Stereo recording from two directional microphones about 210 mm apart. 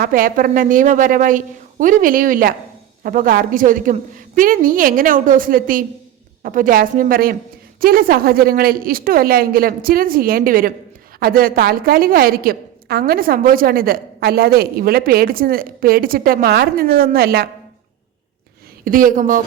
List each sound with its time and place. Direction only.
0.0 s a woman's voice: 45° right (ahead or behind)
18.9 s a woman's voice: 40° right (ahead or behind)